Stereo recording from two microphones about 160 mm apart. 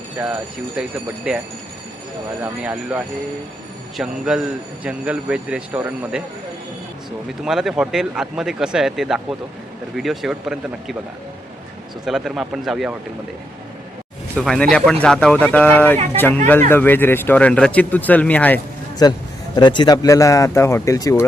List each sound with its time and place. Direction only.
0.2 s a man's voice: 10° right (ahead or behind)
2.4 s a man's voice: 10° right (ahead or behind)
7.4 s speech: 5° right (ahead or behind)
12.0 s speech: centre (ahead or behind)
14.3 s speech: 5° left (ahead or behind)
19.0 s speech: 25° left (ahead or behind)